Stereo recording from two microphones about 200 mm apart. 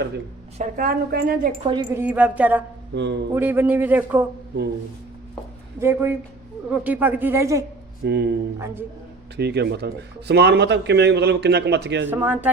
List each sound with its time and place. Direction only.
0.6 s a woman's voice: 45° right (ahead or behind)
1.6 s a woman's voice: 20° right (ahead or behind)
2.9 s speech: 60° right (ahead or behind)
3.3 s a woman's voice: 10° right (ahead or behind)
5.8 s a woman's voice: 10° right (ahead or behind)
8.0 s speech: 55° right (ahead or behind)
8.5 s a woman's voice: 10° right (ahead or behind)
9.3 s speech: 55° right (ahead or behind)
12.0 s a woman's voice: 10° right (ahead or behind)